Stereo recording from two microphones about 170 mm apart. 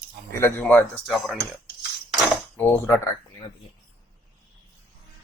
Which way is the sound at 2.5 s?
15° left (ahead or behind).